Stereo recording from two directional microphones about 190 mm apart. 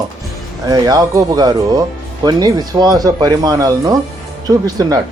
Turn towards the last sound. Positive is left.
turn(degrees=-20)  # may be behind; listen again after turning